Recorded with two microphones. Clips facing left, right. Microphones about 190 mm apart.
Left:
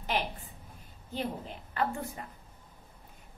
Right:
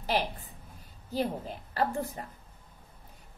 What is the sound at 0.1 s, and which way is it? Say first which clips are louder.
Speech: right 3 dB; 35° right (ahead or behind).